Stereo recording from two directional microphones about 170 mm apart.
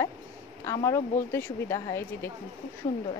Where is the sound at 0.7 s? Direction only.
20° left (ahead or behind).